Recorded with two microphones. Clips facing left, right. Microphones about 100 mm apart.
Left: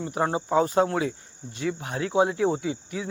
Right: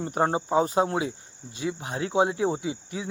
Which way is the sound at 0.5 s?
20° right (ahead or behind).